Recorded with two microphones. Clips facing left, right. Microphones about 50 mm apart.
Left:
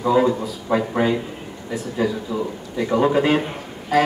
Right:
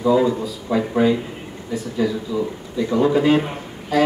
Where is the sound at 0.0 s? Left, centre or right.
Left.